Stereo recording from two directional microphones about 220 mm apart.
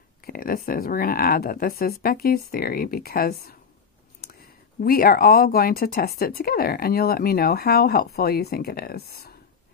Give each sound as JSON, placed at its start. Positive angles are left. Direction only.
{"t": 0.3, "sound": "speech", "side_deg": 40}